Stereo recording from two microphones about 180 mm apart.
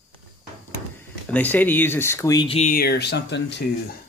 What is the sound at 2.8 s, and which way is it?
Speech, 65° left (ahead or behind).